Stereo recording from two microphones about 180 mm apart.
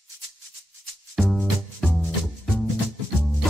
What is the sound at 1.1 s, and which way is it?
Music, centre (ahead or behind).